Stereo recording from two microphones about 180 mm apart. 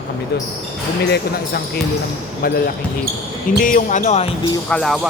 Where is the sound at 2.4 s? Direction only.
55° left (ahead or behind).